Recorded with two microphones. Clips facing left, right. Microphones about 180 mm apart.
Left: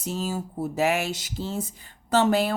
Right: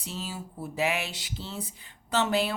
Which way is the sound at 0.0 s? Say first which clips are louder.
Left 8 dB; 45° left (ahead or behind).